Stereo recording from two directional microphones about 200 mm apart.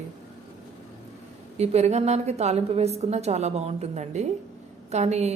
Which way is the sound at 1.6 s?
35° right (ahead or behind).